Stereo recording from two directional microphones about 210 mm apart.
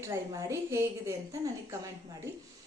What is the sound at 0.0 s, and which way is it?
A woman's voice, 15° right (ahead or behind).